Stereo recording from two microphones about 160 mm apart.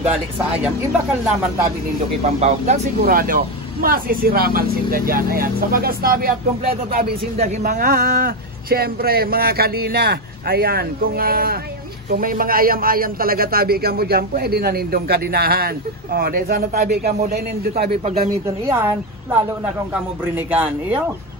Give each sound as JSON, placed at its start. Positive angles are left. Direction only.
{"t": 2.2, "sound": "speech", "side_deg": -45}
{"t": 3.0, "sound": "a man's voice", "side_deg": -65}
{"t": 18.7, "sound": "speech", "side_deg": -15}
{"t": 20.5, "sound": "speech", "side_deg": -10}